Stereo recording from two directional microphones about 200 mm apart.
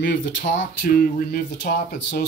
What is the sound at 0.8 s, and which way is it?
Speech, 45° left (ahead or behind).